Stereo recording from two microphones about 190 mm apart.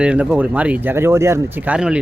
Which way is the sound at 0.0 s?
5° right (ahead or behind).